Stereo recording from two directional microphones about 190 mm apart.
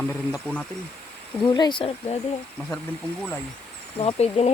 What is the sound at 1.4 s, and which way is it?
Speech, 25° left (ahead or behind).